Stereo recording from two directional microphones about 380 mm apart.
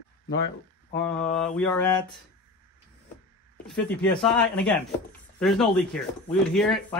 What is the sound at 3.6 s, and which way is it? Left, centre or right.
Mantra, centre.